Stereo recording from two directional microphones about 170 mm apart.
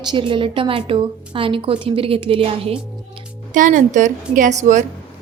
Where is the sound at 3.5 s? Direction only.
50° right (ahead or behind).